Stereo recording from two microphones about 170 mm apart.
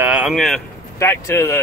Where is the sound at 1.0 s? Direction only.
15° left (ahead or behind).